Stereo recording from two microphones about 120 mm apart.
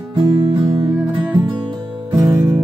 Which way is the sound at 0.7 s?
50° right (ahead or behind).